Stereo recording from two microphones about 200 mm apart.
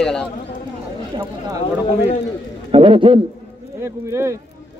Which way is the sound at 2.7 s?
25° right (ahead or behind).